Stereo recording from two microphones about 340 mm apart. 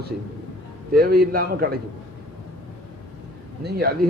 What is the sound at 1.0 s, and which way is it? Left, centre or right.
Speech, right.